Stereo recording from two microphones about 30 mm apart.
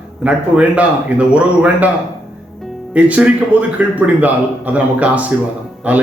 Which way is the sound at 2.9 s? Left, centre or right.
Right.